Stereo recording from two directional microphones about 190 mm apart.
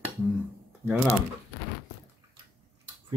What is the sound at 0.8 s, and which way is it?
Speech, 10° left (ahead or behind).